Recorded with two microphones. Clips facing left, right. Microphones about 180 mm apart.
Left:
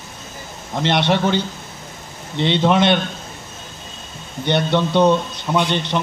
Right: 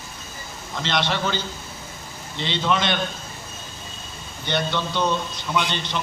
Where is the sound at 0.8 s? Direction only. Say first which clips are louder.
Left 7 dB; 60° left (ahead or behind).